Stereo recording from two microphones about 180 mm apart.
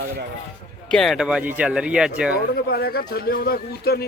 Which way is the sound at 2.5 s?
60° left (ahead or behind).